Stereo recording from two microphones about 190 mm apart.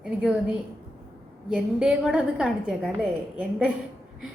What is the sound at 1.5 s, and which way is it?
A woman's voice, 5° right (ahead or behind).